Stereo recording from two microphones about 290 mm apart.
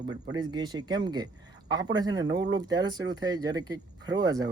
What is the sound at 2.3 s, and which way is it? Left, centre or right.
Speech, right.